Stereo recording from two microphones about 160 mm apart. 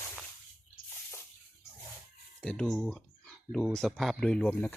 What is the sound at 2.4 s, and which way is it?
Speech, 5° left (ahead or behind).